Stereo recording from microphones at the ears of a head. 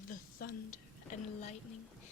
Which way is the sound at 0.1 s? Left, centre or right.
Left.